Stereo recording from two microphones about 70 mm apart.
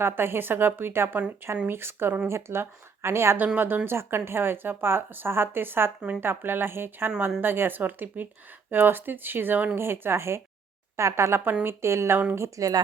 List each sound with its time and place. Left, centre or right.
0.0 s a woman's voice: right
12.5 s speech: right